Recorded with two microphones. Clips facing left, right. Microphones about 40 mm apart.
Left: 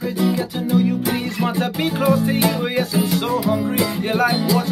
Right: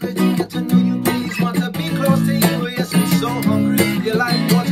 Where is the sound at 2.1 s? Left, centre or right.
Right.